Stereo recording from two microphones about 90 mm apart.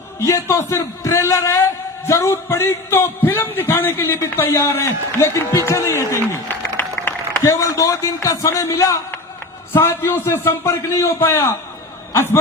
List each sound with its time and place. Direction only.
0.2 s a man's voice: 30° left (ahead or behind)
7.4 s a man's voice: 35° left (ahead or behind)